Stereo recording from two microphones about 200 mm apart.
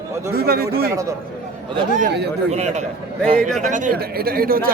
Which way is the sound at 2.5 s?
35° right (ahead or behind).